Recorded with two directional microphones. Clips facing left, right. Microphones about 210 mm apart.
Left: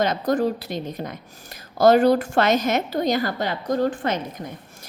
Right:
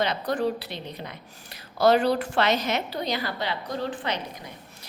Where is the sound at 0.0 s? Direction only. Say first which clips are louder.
Left 5 dB; 45° left (ahead or behind).